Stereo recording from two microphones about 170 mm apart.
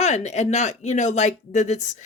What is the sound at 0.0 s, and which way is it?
Speech, 40° left (ahead or behind).